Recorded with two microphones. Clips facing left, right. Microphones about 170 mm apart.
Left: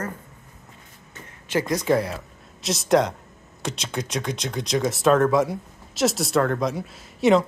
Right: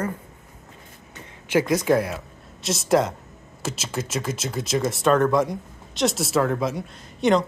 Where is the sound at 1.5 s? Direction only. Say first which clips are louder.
Right 2 dB; 5° right (ahead or behind).